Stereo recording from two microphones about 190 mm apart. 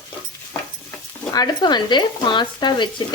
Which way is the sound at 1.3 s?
20° left (ahead or behind).